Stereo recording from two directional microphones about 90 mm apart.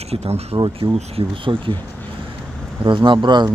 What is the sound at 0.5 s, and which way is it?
Speech, 75° right (ahead or behind).